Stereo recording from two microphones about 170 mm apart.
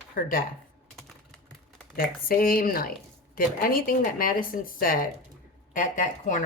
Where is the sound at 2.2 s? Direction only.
60° left (ahead or behind).